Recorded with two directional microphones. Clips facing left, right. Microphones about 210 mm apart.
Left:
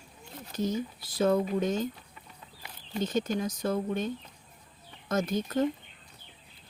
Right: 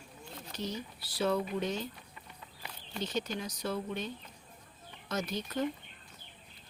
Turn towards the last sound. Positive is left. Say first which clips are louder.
# left 7 dB
turn(degrees=50)  # may be behind; listen again after turning